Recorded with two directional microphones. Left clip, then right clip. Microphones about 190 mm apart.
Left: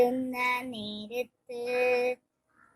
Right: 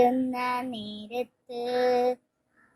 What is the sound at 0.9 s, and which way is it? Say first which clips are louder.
Music: right 2 dB; 30° left (ahead or behind).